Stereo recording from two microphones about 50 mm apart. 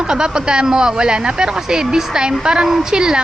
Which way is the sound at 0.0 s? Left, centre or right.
Centre.